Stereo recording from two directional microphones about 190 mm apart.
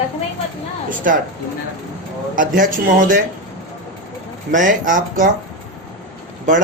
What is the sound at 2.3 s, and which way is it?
Speech, 45° right (ahead or behind).